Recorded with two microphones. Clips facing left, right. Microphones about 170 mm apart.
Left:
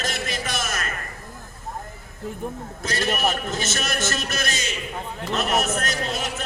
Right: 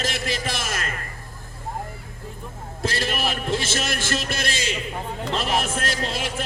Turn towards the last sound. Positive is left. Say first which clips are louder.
# even
turn(degrees=-30)  # may be behind; listen again after turning